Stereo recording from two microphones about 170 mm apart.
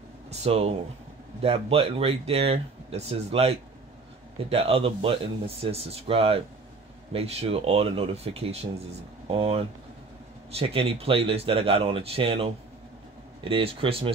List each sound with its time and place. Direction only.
0.3 s speech: 40° right (ahead or behind)